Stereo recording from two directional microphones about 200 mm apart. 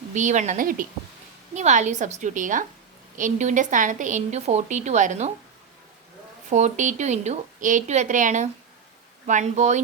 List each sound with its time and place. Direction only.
0.1 s a woman's voice: 40° right (ahead or behind)
6.5 s a woman's voice: 35° right (ahead or behind)